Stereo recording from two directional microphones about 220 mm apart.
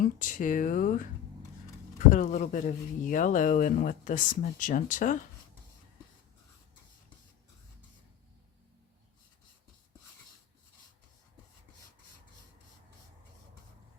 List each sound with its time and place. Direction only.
0.0 s speech: 35° left (ahead or behind)
2.0 s speech: 35° left (ahead or behind)